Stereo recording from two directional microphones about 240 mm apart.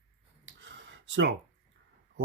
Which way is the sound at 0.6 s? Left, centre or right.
Right.